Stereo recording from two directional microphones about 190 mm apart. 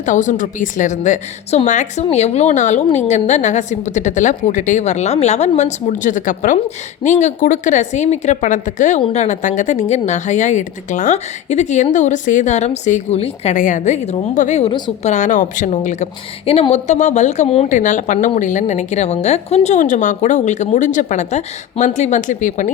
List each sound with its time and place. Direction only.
0.0 s a woman's voice: 40° left (ahead or behind)
14.7 s a woman's voice: 25° left (ahead or behind)
15.1 s a woman's voice: 40° left (ahead or behind)